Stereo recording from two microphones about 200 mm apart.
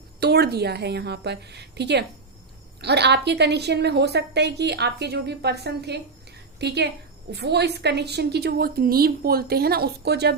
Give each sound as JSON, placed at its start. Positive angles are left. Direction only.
{"t": 0.2, "sound": "a woman's voice", "side_deg": -55}